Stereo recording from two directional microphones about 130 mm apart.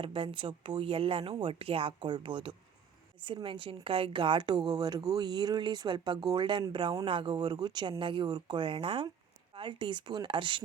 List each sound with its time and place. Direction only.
0.0 s speech: 45° right (ahead or behind)